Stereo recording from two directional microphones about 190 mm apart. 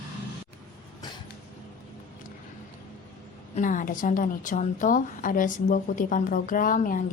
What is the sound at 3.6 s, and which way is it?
A woman's voice, 45° left (ahead or behind).